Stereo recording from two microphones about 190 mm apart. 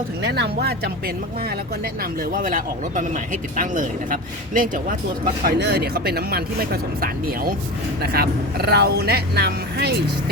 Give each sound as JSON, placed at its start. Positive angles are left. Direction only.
{"t": 0.2, "sound": "speech", "side_deg": -60}